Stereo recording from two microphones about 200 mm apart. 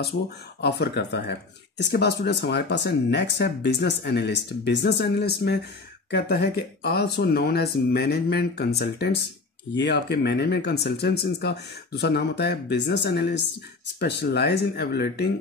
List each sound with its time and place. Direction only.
0.6 s speech: 55° left (ahead or behind)